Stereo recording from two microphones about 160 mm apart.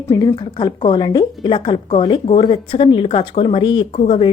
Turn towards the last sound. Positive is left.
turn(degrees=30)  # may be behind; listen again after turning